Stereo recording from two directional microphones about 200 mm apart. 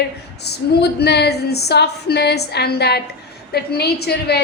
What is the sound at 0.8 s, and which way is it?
A woman's voice, 55° left (ahead or behind).